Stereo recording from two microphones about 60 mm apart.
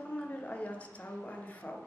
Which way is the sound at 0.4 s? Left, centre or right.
Left.